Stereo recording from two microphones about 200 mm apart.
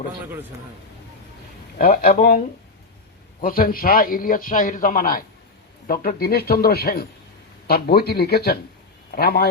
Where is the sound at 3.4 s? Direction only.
45° left (ahead or behind).